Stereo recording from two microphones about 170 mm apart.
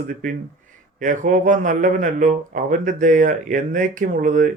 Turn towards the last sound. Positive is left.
turn(degrees=-50)  # may be behind; listen again after turning